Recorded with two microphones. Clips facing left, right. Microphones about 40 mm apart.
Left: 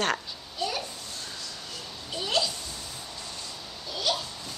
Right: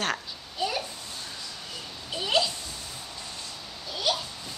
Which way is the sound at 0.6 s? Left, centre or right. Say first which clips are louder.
Right 1 dB; centre.